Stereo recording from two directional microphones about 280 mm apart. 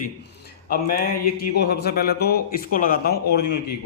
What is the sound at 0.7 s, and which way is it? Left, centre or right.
Speech, left.